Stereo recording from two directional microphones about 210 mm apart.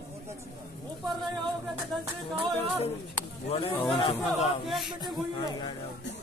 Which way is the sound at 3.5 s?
25° left (ahead or behind).